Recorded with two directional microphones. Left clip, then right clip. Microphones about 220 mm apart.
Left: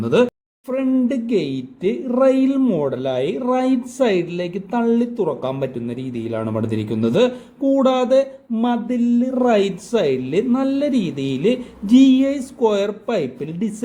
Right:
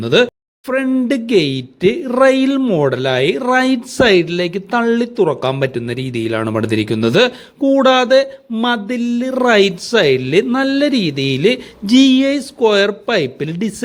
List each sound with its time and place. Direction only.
0.0 s speech: 15° right (ahead or behind)